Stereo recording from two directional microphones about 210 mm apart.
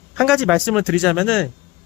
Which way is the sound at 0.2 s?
Centre (ahead or behind).